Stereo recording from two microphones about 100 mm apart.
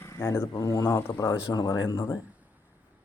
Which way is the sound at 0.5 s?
35° left (ahead or behind).